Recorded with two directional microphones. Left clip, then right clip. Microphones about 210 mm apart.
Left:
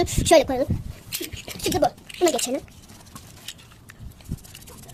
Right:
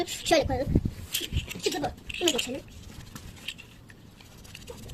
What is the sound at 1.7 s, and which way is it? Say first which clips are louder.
Speech: left 10 dB; 60° left (ahead or behind).